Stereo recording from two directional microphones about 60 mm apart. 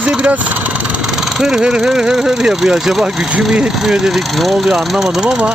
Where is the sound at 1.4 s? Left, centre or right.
Centre.